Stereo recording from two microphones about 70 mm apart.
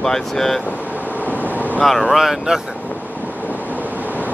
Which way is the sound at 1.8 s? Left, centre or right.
Centre.